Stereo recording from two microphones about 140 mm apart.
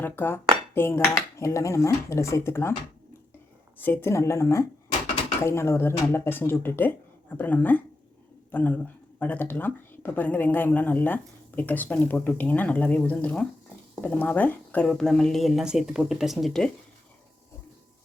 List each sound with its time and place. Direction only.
0.0 s cutlery: 15° left (ahead or behind)
3.8 s cutlery: 15° left (ahead or behind)
5.4 s speech: 20° left (ahead or behind); by 16.7 s 5° left (ahead or behind)